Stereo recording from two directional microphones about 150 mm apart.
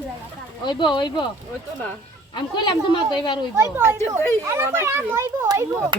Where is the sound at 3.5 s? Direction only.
15° right (ahead or behind).